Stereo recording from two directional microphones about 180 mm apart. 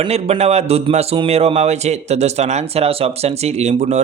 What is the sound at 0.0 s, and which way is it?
Speech, 35° right (ahead or behind).